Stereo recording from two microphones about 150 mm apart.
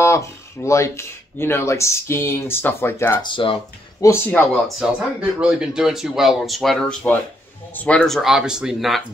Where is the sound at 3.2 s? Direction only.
35° left (ahead or behind).